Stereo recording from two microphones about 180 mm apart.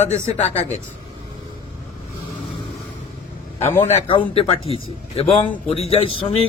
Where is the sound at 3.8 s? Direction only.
35° left (ahead or behind).